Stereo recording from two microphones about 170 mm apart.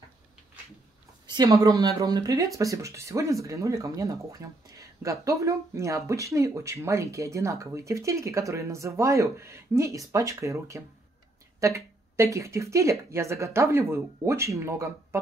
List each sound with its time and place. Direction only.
1.2 s speech: 25° right (ahead or behind)